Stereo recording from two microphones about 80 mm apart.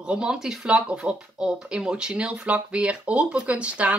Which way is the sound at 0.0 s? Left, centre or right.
Centre.